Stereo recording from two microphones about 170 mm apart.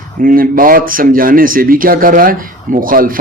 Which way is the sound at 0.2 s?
55° right (ahead or behind).